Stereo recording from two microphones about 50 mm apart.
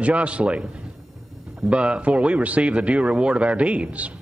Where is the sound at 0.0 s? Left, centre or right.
Right.